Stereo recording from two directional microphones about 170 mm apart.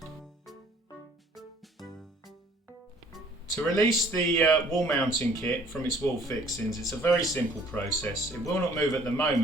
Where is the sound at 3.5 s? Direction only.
20° left (ahead or behind).